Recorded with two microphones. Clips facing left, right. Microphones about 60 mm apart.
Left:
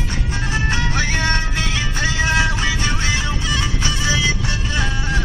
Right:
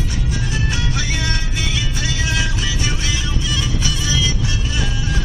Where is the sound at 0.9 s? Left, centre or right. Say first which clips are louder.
Left 4 dB; left.